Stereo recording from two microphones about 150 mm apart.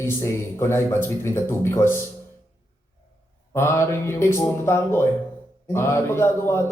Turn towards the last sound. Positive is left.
turn(degrees=15)  # may be behind; listen again after turning